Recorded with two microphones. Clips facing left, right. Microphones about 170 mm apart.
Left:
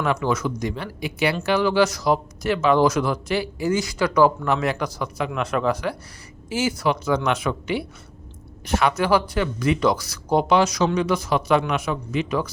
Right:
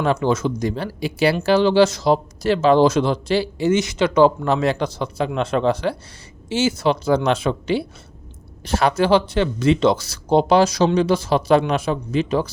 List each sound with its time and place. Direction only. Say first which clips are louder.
0.0 s speech: right 4 dB; 30° right (ahead or behind)